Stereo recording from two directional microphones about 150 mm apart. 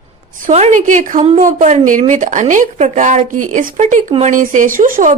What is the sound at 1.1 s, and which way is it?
Speech, 40° right (ahead or behind).